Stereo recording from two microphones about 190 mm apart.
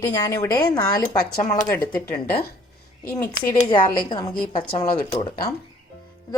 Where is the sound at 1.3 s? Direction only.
40° left (ahead or behind).